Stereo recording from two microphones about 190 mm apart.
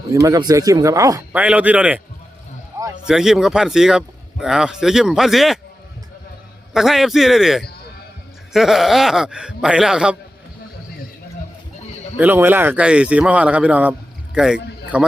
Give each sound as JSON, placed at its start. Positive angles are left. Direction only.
{"t": 0.1, "sound": "speech", "side_deg": -15}
{"t": 2.7, "sound": "a sound", "side_deg": -15}
{"t": 3.1, "sound": "a man's voice", "side_deg": 0}
{"t": 6.7, "sound": "a man's voice", "side_deg": 0}
{"t": 12.1, "sound": "speech", "side_deg": -10}